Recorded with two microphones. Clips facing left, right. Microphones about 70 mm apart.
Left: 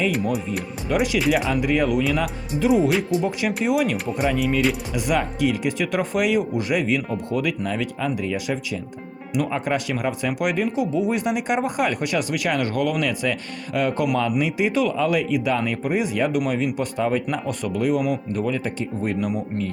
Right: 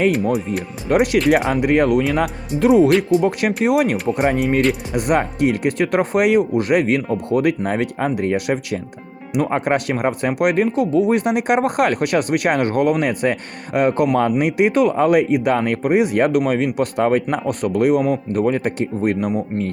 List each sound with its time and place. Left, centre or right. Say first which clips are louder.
0.9 s speech: right 6 dB; right
3.9 s speech: right 6 dB; centre
4.2 s speech: right 3 dB; right
19.2 s speech: right 4 dB; right